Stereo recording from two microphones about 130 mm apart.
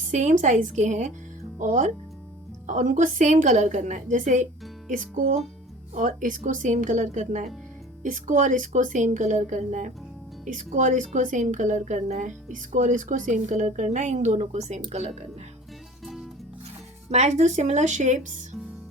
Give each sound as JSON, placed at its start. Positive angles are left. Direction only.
{"t": 0.1, "sound": "speech", "side_deg": -65}
{"t": 4.9, "sound": "music", "side_deg": -85}
{"t": 5.9, "sound": "speech", "side_deg": -75}
{"t": 8.0, "sound": "a woman's voice", "side_deg": -90}
{"t": 16.0, "sound": "music", "side_deg": 0}
{"t": 17.1, "sound": "a woman's voice", "side_deg": -60}